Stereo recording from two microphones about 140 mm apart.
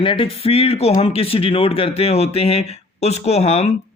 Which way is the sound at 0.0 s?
40° left (ahead or behind).